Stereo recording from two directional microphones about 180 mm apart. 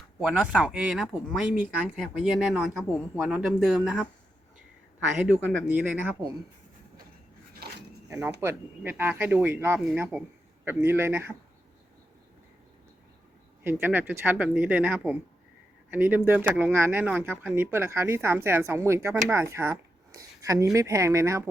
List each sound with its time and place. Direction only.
0.2 s speech: 5° right (ahead or behind)
5.1 s speech: 5° right (ahead or behind)
8.4 s speech: 15° right (ahead or behind)
13.7 s speech: 10° right (ahead or behind)